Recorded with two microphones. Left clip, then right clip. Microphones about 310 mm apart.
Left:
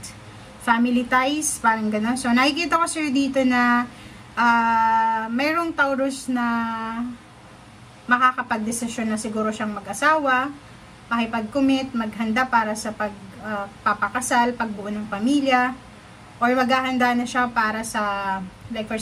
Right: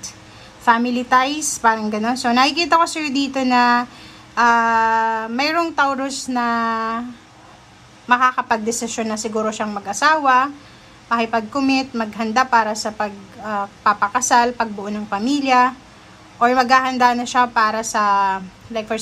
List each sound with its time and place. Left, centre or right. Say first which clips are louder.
0.7 s a woman's voice: right 5 dB; centre
8.1 s a woman's voice: right 3 dB; centre